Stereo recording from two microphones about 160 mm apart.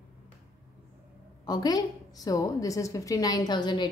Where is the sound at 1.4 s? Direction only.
25° left (ahead or behind).